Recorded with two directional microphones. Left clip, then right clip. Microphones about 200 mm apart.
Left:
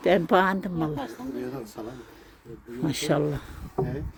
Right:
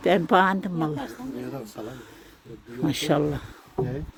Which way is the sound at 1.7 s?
20° right (ahead or behind).